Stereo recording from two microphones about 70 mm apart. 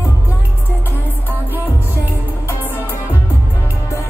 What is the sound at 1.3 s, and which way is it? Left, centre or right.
Music, right.